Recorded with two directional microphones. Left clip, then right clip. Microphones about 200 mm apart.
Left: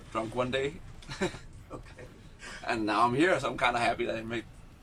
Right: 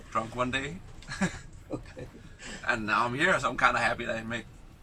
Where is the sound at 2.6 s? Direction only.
20° left (ahead or behind).